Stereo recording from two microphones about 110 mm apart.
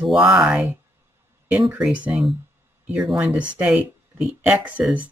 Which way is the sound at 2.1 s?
Centre (ahead or behind).